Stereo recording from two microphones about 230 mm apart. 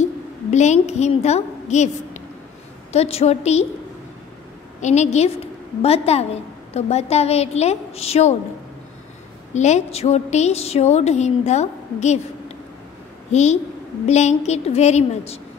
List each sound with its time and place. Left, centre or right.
0.5 s a woman's voice: left
4.8 s a woman's voice: left
9.5 s a woman's voice: left